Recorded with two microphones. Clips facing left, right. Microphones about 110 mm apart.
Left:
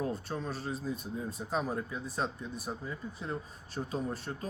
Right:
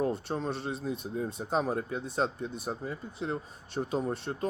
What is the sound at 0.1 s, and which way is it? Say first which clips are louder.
Speech: right 4 dB; 30° right (ahead or behind).